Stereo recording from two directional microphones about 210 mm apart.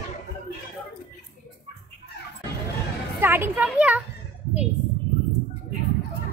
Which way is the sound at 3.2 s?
10° right (ahead or behind).